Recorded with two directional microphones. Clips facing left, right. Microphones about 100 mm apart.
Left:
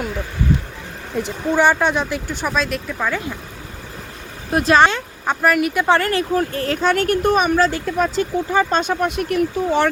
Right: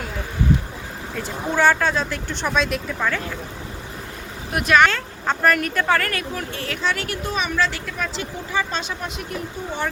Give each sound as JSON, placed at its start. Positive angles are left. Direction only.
{"t": 1.1, "sound": "speech", "side_deg": 20}
{"t": 4.5, "sound": "speech", "side_deg": 30}
{"t": 4.9, "sound": "speech", "side_deg": 15}
{"t": 5.9, "sound": "speech", "side_deg": 25}
{"t": 6.3, "sound": "speech", "side_deg": 40}